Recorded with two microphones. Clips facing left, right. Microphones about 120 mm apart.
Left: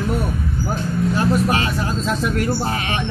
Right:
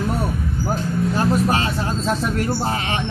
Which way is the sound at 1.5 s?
30° right (ahead or behind).